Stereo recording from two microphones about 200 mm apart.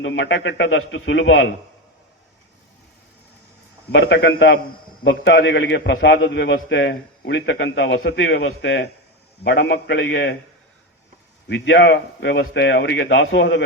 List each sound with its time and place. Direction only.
0.0 s a man's voice: 65° left (ahead or behind)
3.9 s a man's voice: 60° left (ahead or behind)
11.4 s a man's voice: 65° left (ahead or behind)